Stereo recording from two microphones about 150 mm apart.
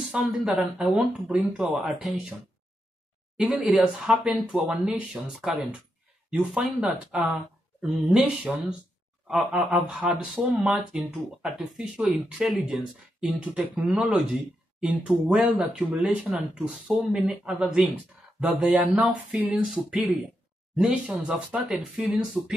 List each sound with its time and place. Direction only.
0.1 s speech: 5° right (ahead or behind)
3.3 s speech: centre (ahead or behind)